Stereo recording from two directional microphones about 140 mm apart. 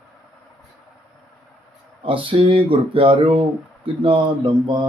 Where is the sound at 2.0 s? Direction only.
40° right (ahead or behind).